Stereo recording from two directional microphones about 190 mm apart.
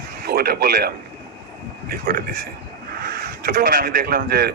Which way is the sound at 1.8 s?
50° right (ahead or behind).